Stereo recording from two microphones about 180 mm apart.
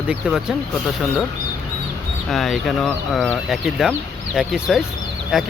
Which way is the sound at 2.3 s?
Centre (ahead or behind).